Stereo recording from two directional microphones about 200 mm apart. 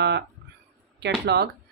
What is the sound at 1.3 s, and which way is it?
Speech, 55° right (ahead or behind).